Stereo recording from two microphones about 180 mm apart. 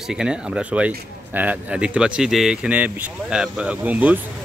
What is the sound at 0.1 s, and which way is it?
A man's voice, 5° right (ahead or behind).